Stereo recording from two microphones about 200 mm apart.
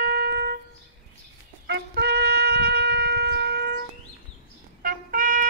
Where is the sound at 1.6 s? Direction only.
60° right (ahead or behind).